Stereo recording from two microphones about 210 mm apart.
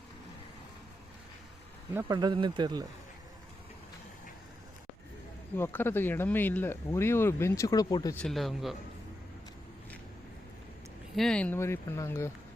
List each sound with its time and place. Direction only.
2.0 s speech: 20° right (ahead or behind)
5.5 s speech: 10° left (ahead or behind)
8.2 s speech: centre (ahead or behind)
11.1 s speech: centre (ahead or behind)